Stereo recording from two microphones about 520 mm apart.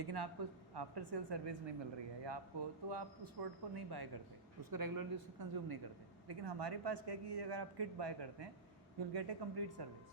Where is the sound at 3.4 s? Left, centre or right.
Right.